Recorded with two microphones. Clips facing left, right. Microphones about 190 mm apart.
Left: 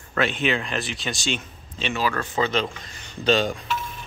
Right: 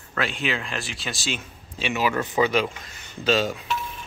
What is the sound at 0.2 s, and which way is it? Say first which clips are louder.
Speech: left 4 dB; centre (ahead or behind).